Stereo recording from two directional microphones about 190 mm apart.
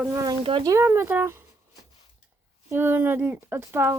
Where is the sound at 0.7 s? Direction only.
15° right (ahead or behind).